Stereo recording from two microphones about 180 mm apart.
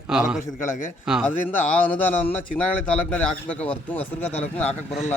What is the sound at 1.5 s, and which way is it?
A man's voice, 10° left (ahead or behind).